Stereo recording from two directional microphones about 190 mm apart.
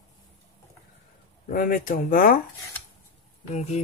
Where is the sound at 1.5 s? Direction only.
45° left (ahead or behind).